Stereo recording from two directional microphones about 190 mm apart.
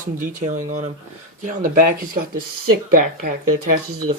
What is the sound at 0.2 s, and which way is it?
Speech, 45° right (ahead or behind).